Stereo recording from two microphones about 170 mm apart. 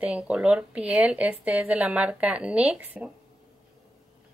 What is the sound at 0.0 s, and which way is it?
Speech, 5° right (ahead or behind).